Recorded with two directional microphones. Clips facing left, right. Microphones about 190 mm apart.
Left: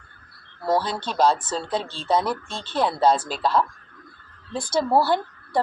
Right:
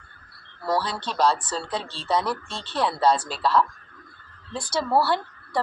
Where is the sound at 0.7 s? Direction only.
50° left (ahead or behind).